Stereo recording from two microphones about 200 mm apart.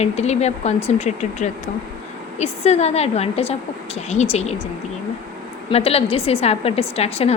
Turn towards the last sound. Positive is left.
turn(degrees=30)  # may be behind; listen again after turning